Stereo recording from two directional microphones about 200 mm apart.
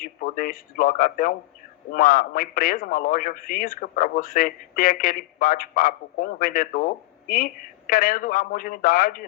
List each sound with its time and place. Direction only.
0.0 s a man's voice: 45° left (ahead or behind)